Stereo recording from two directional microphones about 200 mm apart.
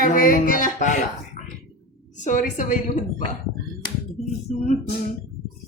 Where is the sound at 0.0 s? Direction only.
45° left (ahead or behind).